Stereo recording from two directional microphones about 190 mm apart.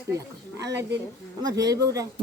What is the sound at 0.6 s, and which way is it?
Speech, 65° right (ahead or behind).